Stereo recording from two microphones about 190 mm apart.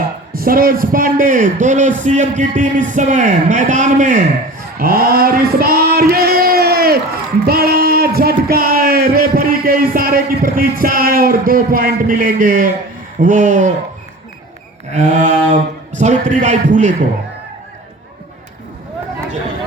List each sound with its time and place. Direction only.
0.3 s a man's voice: 50° right (ahead or behind)
4.8 s a sound: 50° right (ahead or behind)
13.2 s a man's voice: 40° right (ahead or behind)
14.9 s a man's voice: 40° right (ahead or behind)